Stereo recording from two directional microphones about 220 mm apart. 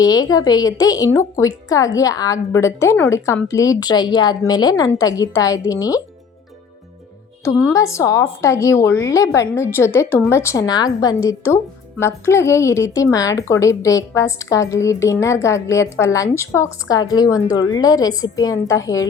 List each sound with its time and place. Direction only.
0.0 s a woman's voice: 15° left (ahead or behind)
7.4 s a woman's voice: 15° left (ahead or behind)